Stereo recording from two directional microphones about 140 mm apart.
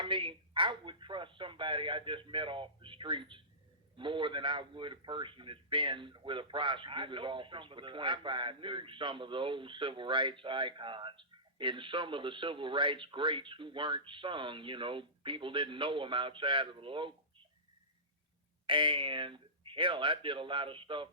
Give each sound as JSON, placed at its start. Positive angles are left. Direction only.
{"t": 0.0, "sound": "a man's voice", "side_deg": -35}
{"t": 18.6, "sound": "a man's voice", "side_deg": -35}